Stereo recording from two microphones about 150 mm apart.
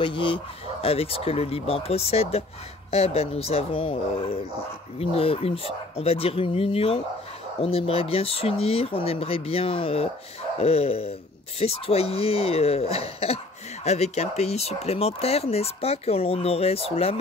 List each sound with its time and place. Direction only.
0.0 s speech: 35° left (ahead or behind)